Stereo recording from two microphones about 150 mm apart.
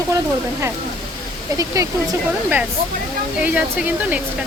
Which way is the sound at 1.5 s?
20° right (ahead or behind).